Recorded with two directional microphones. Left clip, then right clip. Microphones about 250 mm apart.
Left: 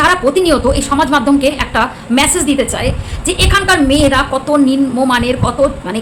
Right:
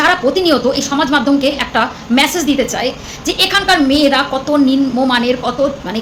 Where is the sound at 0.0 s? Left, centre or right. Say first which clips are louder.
Left 1 dB; centre.